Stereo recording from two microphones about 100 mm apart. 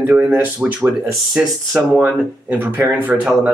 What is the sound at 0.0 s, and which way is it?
Speech, 20° right (ahead or behind).